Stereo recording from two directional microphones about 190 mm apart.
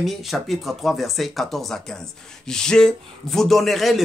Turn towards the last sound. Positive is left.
turn(degrees=0)  # may be behind; listen again after turning